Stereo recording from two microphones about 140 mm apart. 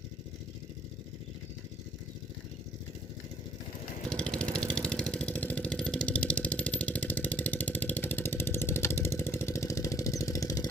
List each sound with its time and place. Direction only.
4.1 s vehicle: 5° left (ahead or behind); by 10.7 s 25° left (ahead or behind)